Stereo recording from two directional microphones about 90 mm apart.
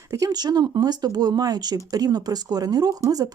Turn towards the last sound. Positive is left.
turn(degrees=-45)  # may be behind; listen again after turning